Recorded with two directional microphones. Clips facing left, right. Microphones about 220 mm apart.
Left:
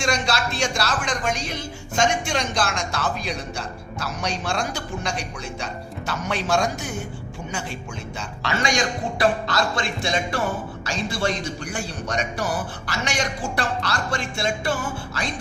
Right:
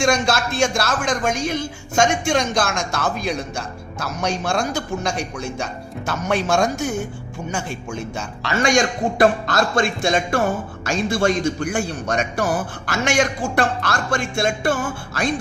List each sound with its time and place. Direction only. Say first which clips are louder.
0.0 s speech: right 5 dB; 50° right (ahead or behind)
8.6 s speech: right 7 dB; 50° right (ahead or behind)